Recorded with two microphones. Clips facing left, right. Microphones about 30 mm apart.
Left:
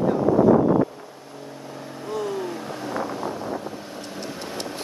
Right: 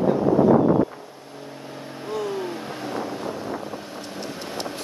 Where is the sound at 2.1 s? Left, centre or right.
Centre.